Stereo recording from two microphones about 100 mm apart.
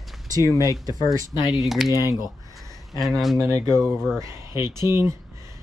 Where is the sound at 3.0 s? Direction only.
Centre (ahead or behind).